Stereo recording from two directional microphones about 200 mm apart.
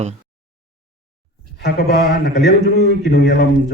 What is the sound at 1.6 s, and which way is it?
Speech, 50° left (ahead or behind).